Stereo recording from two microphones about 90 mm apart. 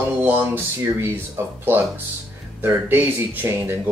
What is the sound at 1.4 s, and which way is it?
Speech, 35° right (ahead or behind).